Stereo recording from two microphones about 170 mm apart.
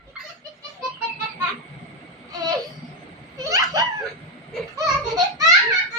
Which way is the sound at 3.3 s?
20° right (ahead or behind).